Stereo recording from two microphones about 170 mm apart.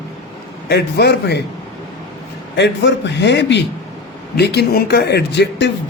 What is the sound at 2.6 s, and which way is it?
A man's voice, 90° left.